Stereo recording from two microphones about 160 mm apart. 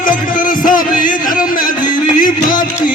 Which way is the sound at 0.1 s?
55° left (ahead or behind).